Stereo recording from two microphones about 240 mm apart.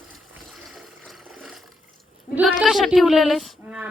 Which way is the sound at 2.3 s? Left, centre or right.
Centre.